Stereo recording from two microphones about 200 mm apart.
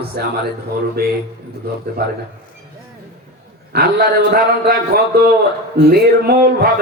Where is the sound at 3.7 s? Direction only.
55° right (ahead or behind).